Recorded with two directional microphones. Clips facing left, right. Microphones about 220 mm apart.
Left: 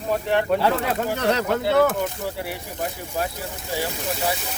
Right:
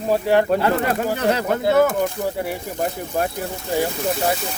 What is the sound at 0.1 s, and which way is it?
Speech, 40° right (ahead or behind).